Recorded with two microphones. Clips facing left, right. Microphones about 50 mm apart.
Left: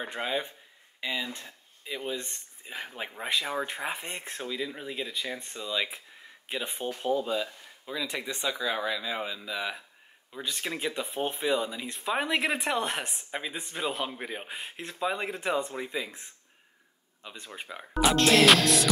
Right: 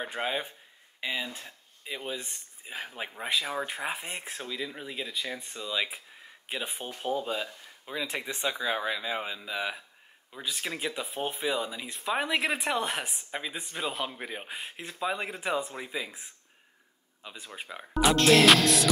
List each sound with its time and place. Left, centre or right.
0.0 s speech: centre
7.1 s speech: centre
9.4 s speech: centre